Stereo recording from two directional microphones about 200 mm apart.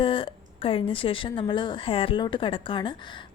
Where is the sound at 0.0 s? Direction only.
25° left (ahead or behind).